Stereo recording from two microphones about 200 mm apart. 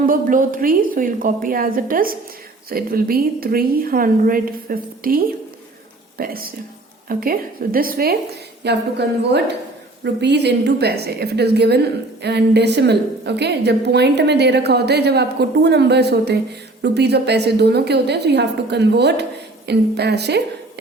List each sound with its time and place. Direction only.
0.0 s a woman's voice: 45° right (ahead or behind)